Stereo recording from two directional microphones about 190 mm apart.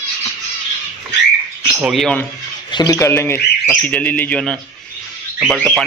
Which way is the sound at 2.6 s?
20° left (ahead or behind).